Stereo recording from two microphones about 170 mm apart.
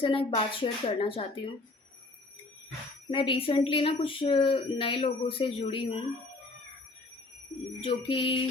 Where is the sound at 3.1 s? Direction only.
30° left (ahead or behind).